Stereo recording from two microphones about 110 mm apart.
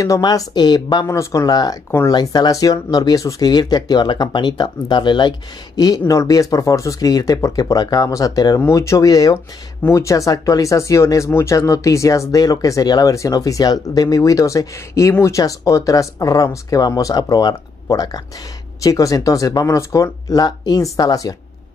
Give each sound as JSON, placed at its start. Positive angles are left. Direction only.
{"t": 0.0, "sound": "speech", "side_deg": 35}
{"t": 1.0, "sound": "speech", "side_deg": 30}
{"t": 5.8, "sound": "speech", "side_deg": 35}